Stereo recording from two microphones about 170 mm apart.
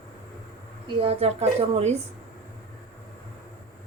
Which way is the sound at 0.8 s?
35° right (ahead or behind).